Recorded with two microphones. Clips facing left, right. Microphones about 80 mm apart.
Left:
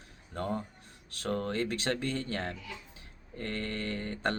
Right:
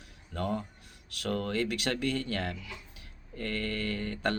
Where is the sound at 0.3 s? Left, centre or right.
Left.